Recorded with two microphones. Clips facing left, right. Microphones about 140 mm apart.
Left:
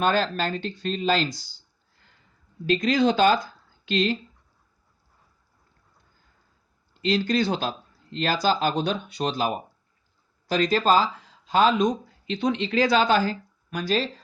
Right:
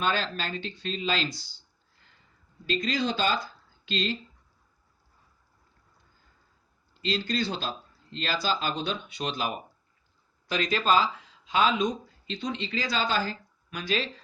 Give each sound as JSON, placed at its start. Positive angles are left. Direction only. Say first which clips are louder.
{"t": 0.0, "sound": "speech", "louder": "left 6 dB", "side_deg": 45}
{"t": 2.6, "sound": "speech", "louder": "left 8 dB", "side_deg": 55}
{"t": 7.0, "sound": "speech", "louder": "left 6 dB", "side_deg": 50}
{"t": 12.3, "sound": "speech", "louder": "left 8 dB", "side_deg": 60}